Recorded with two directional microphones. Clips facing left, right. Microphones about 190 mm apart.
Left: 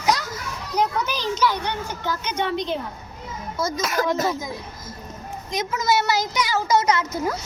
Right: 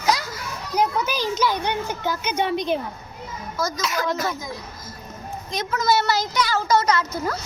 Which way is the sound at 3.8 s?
50° left (ahead or behind).